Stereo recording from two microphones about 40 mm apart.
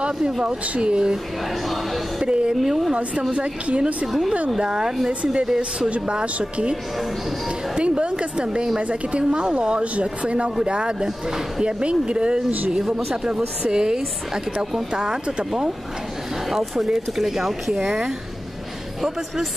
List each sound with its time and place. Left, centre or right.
0.0 s speech: right
2.6 s speech: centre
3.3 s speech: right
16.4 s speech: centre